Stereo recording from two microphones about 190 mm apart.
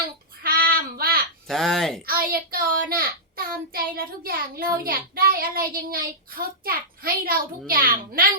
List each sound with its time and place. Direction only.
0.4 s child singing: 50° right (ahead or behind)
1.5 s speech: centre (ahead or behind)
2.0 s a child's voice: 50° right (ahead or behind)